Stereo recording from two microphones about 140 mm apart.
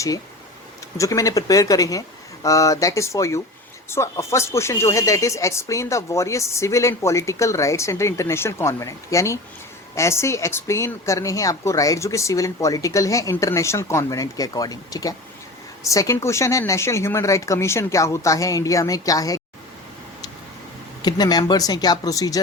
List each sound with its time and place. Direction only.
0.9 s speech: 25° left (ahead or behind)
21.0 s speech: 30° left (ahead or behind)